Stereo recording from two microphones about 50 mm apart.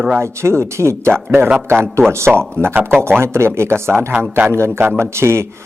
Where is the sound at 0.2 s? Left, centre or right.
Right.